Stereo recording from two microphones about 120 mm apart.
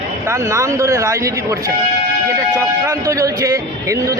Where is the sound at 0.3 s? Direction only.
25° right (ahead or behind).